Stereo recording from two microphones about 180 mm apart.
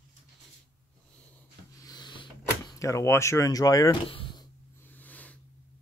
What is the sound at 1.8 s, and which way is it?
Door, 20° left (ahead or behind).